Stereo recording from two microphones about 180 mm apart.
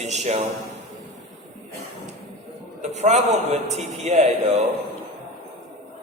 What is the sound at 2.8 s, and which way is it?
A man's voice, 40° right (ahead or behind).